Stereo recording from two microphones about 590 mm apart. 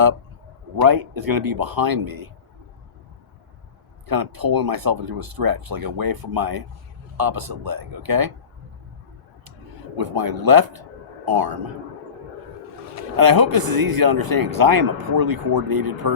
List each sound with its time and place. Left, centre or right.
0.8 s a man's voice: right
4.0 s a man's voice: right
10.0 s a man's voice: right
13.0 s a man's voice: right